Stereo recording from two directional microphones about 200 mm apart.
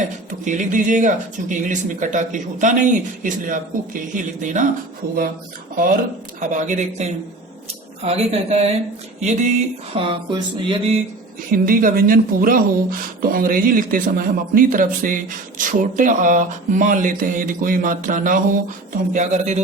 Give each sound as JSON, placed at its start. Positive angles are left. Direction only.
{"t": 0.4, "sound": "speech", "side_deg": -40}
{"t": 5.7, "sound": "speech", "side_deg": -45}
{"t": 9.2, "sound": "a sound", "side_deg": -35}
{"t": 11.5, "sound": "speech", "side_deg": -45}